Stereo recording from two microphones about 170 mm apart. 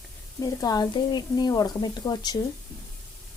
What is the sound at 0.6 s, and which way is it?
A woman's voice, 25° left (ahead or behind).